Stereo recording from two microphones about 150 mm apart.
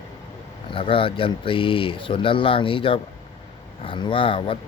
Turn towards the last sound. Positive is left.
turn(degrees=35)  # may be behind; listen again after turning